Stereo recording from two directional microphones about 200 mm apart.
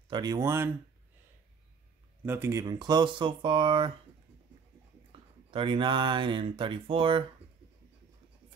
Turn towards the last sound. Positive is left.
turn(degrees=-25)  # may be behind; listen again after turning